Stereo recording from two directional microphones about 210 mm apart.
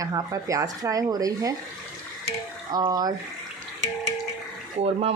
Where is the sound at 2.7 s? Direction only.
20° right (ahead or behind).